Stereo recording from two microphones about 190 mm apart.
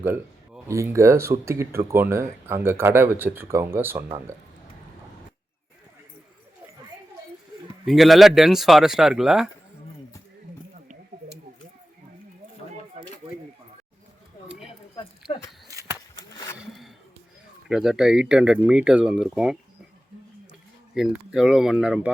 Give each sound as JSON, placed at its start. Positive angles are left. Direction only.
{"t": 0.0, "sound": "speech", "side_deg": -10}
{"t": 7.9, "sound": "speech", "side_deg": 0}
{"t": 15.7, "sound": "a sound", "side_deg": -15}
{"t": 16.0, "sound": "a sound", "side_deg": 20}
{"t": 17.7, "sound": "speech", "side_deg": 0}
{"t": 20.9, "sound": "speech", "side_deg": 0}